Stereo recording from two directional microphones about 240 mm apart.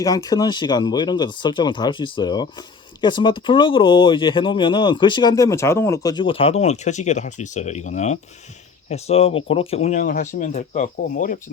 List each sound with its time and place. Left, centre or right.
0.0 s speech: centre; by 11.3 s left